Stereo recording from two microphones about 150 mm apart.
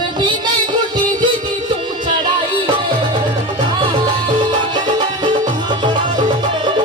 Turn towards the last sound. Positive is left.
turn(degrees=-30)  # may be behind; listen again after turning